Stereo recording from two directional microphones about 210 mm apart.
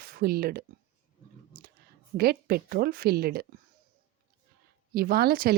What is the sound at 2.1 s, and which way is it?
A woman's voice, 45° right (ahead or behind).